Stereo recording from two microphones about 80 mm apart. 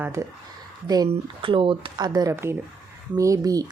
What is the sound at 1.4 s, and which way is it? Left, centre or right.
Speech, right.